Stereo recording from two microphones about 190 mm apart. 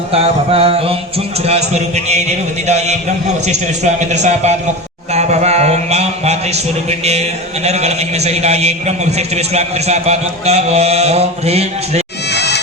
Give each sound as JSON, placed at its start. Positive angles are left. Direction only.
{"t": 0.1, "sound": "a man's voice", "side_deg": -30}
{"t": 5.1, "sound": "a sound", "side_deg": -35}
{"t": 7.0, "sound": "a man's voice", "side_deg": -35}
{"t": 12.3, "sound": "insect", "side_deg": 60}